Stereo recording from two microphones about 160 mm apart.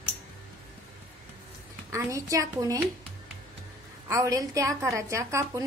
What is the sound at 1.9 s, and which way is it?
Speech, 20° right (ahead or behind).